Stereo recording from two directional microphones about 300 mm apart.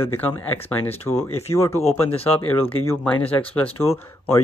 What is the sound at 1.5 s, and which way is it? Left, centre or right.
Speech, centre.